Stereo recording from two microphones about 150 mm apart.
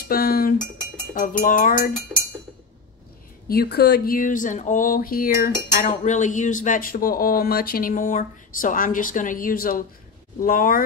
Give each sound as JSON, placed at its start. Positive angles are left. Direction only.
{"t": 0.1, "sound": "dishes", "side_deg": 80}
{"t": 1.1, "sound": "speech", "side_deg": 65}
{"t": 3.4, "sound": "speech", "side_deg": 90}